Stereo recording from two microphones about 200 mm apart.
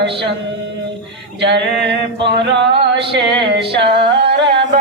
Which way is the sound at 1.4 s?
60° right (ahead or behind).